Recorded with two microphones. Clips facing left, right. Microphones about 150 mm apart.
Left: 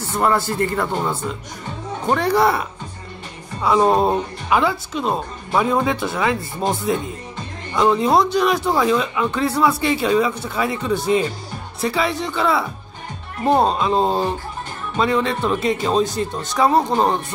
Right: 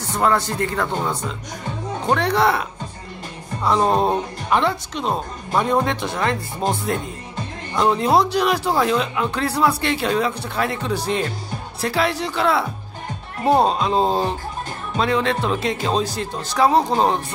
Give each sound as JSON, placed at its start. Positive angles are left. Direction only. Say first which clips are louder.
{"t": 0.0, "sound": "speech", "louder": "even", "side_deg": 0}
{"t": 3.6, "sound": "speech", "louder": "left 2 dB", "side_deg": 5}